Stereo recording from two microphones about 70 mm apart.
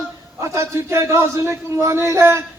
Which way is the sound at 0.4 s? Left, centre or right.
Right.